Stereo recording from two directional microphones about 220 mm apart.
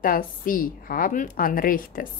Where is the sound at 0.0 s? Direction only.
40° left (ahead or behind).